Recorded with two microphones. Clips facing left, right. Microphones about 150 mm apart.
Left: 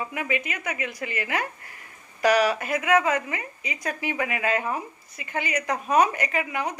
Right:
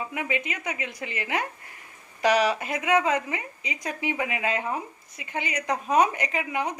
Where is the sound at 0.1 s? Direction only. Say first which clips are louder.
Left 1 dB; 20° right (ahead or behind).